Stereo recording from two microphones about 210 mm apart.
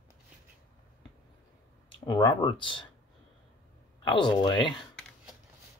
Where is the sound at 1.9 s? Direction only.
20° left (ahead or behind).